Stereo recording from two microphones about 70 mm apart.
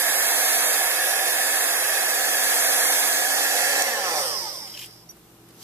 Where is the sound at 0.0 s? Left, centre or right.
Right.